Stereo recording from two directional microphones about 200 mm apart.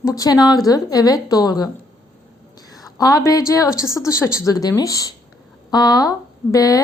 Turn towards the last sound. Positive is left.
turn(degrees=20)  # may be behind; listen again after turning